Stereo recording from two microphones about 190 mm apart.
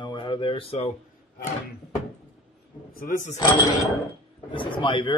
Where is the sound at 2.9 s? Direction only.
45° left (ahead or behind).